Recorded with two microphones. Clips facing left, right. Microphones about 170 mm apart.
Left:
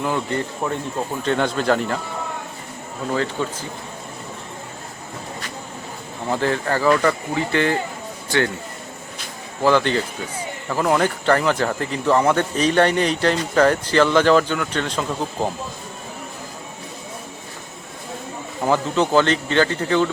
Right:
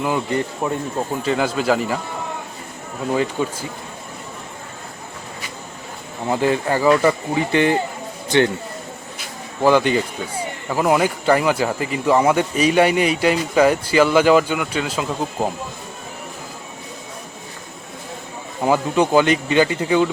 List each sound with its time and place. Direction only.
0.0 s speech: 15° right (ahead or behind)
3.1 s speech: 15° right (ahead or behind)
6.2 s speech: 15° right (ahead or behind)
9.6 s speech: 15° right (ahead or behind)
18.6 s speech: 15° right (ahead or behind)